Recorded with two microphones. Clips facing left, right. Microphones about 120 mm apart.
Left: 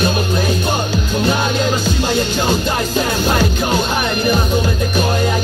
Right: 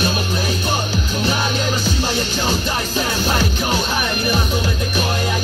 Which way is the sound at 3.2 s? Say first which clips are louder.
Left 4 dB; 45° left (ahead or behind).